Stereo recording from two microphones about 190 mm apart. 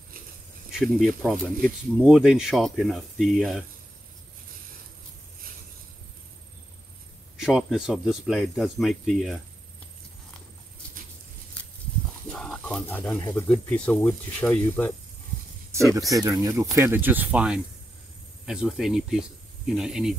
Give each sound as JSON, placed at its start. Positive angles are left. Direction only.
{"t": 0.7, "sound": "speech", "side_deg": 0}
{"t": 7.3, "sound": "speech", "side_deg": -5}
{"t": 12.3, "sound": "speech", "side_deg": 0}
{"t": 15.7, "sound": "speech", "side_deg": -15}